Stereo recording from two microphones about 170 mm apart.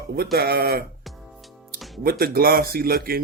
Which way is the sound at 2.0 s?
60° right (ahead or behind).